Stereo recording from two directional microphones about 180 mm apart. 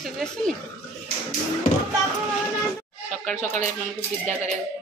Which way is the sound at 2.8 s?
5° left (ahead or behind).